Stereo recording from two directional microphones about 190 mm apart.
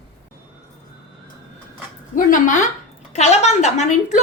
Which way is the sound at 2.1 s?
40° left (ahead or behind).